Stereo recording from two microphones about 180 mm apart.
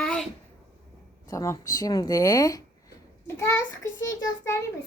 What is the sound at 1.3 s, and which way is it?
A woman's voice, 20° left (ahead or behind).